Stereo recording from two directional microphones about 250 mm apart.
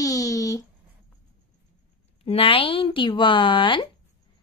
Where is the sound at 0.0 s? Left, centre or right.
Centre.